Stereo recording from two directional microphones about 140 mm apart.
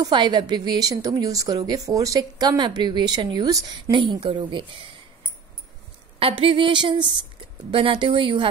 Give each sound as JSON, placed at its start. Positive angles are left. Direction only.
{"t": 0.0, "sound": "a woman's voice", "side_deg": -30}
{"t": 6.1, "sound": "speech", "side_deg": -40}